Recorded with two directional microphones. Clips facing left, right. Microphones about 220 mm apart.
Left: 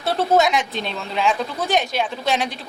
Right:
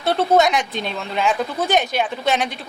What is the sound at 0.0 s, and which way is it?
Speech, centre (ahead or behind).